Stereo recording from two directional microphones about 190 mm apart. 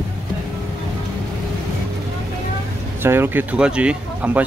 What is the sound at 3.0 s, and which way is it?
Speech, 10° right (ahead or behind).